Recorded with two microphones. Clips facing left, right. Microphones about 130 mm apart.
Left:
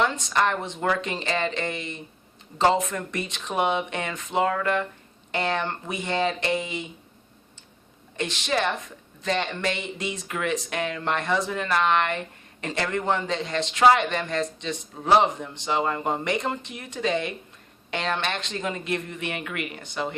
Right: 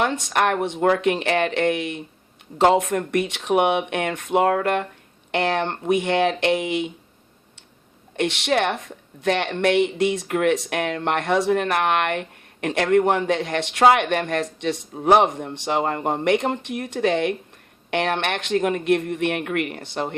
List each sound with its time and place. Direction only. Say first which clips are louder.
0.0 s speech: right 2 dB; 60° right (ahead or behind)
8.1 s speech: right 5 dB; 70° right (ahead or behind)